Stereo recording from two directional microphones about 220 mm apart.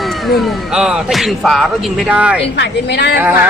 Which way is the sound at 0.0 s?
Centre (ahead or behind).